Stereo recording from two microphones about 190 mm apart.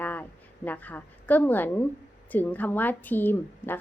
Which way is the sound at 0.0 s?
10° left (ahead or behind).